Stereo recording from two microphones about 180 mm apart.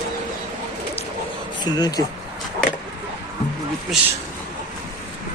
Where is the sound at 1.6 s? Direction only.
20° left (ahead or behind).